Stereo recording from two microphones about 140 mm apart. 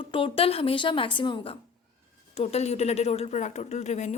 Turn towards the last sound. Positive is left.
turn(degrees=55)  # may be behind; listen again after turning